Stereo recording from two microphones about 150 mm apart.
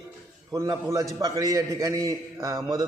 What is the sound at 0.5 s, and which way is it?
A man's voice, 20° right (ahead or behind).